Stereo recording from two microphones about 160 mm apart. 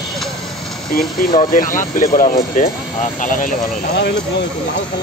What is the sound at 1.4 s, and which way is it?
Speech, 55° left (ahead or behind).